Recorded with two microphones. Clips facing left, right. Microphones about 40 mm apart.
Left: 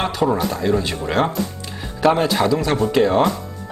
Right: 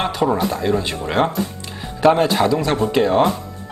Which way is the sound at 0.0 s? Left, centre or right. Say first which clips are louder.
Right 1 dB; centre.